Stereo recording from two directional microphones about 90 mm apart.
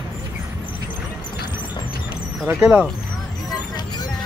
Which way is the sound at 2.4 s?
15° right (ahead or behind).